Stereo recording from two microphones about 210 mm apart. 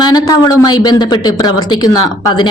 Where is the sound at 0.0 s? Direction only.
20° left (ahead or behind).